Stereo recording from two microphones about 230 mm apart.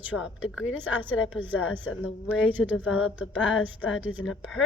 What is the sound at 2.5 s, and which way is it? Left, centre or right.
Speech, centre.